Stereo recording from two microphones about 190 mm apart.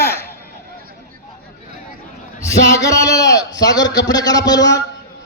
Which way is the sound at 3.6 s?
20° left (ahead or behind).